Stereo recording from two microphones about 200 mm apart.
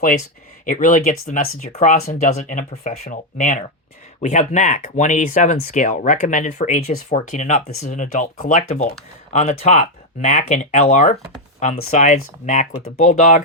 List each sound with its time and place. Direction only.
0.6 s speech: 40° left (ahead or behind)
9.3 s speech: 35° left (ahead or behind)